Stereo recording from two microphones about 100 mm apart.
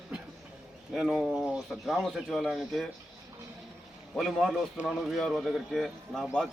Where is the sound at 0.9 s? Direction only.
5° right (ahead or behind).